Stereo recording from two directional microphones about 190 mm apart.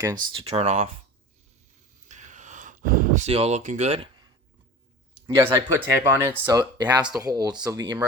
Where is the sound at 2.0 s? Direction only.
40° right (ahead or behind).